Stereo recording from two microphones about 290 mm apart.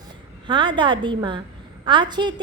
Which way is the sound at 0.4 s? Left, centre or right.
Centre.